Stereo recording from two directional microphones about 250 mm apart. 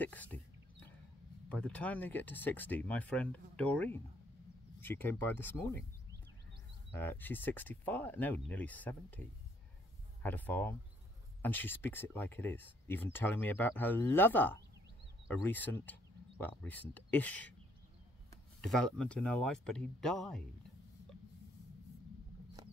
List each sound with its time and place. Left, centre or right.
0.0 s speech: centre
1.5 s speech: centre
7.0 s speech: centre
18.6 s speech: centre